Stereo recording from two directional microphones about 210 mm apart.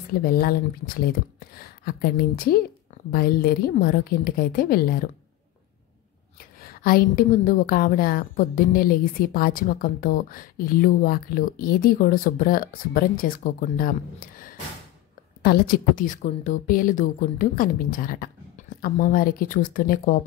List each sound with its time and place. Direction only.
0.2 s a woman's voice: 45° left (ahead or behind)
6.6 s a woman's voice: 45° left (ahead or behind)
15.4 s speech: 45° left (ahead or behind)